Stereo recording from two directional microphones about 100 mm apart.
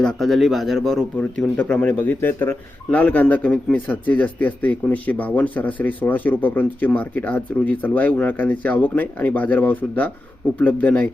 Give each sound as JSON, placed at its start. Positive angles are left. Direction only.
{"t": 0.0, "sound": "a man's voice", "side_deg": 5}